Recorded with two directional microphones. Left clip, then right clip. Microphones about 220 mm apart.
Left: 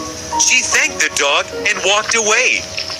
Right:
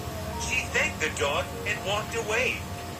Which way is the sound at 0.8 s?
40° left (ahead or behind).